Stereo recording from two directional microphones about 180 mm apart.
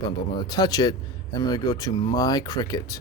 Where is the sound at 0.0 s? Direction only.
20° left (ahead or behind).